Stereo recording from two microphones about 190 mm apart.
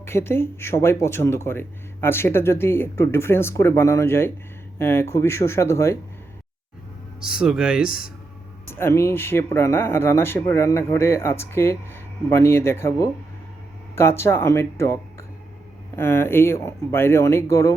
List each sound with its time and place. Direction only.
0.0 s speech: 15° left (ahead or behind)
7.2 s speech: 5° right (ahead or behind)
7.9 s speech: 50° left (ahead or behind)
8.8 s speech: 15° left (ahead or behind)
16.0 s speech: 10° left (ahead or behind)